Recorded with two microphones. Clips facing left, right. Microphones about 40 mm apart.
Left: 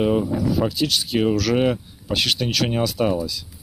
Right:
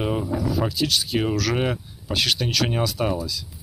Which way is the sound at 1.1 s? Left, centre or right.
Centre.